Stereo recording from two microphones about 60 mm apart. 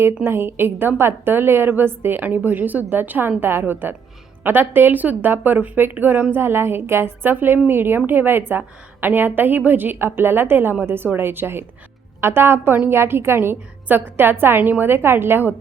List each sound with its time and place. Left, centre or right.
0.3 s a woman's voice: right